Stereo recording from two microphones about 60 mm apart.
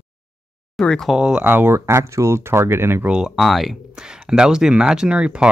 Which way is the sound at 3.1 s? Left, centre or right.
Centre.